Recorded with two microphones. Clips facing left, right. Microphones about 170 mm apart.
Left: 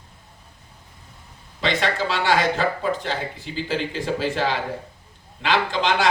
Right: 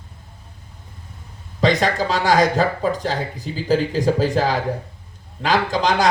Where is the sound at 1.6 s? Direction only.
40° right (ahead or behind).